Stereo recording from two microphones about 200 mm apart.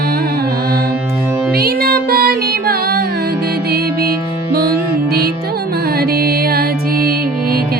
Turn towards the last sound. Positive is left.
turn(degrees=-50)  # may be behind; listen again after turning